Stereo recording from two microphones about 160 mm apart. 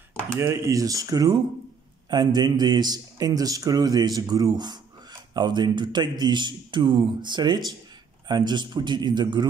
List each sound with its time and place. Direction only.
0.4 s a man's voice: 20° right (ahead or behind)